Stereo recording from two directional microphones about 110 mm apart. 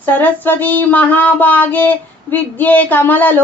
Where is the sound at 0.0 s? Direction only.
15° left (ahead or behind).